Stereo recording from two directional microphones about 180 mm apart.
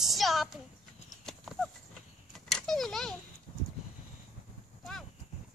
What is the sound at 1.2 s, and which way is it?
Horse, centre (ahead or behind).